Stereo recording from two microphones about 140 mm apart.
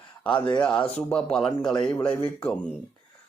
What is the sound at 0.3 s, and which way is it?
Speech, 35° left (ahead or behind).